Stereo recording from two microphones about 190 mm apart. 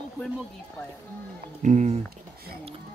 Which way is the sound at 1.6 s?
35° right (ahead or behind).